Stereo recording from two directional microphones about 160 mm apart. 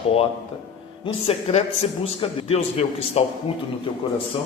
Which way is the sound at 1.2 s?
40° left (ahead or behind).